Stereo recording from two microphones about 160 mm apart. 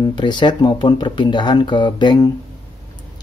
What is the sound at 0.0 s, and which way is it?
Speech, 30° left (ahead or behind).